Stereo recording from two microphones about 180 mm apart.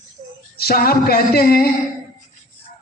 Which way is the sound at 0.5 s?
60° left (ahead or behind).